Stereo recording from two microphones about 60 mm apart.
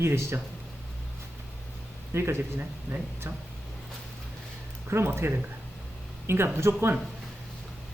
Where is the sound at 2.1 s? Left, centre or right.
Right.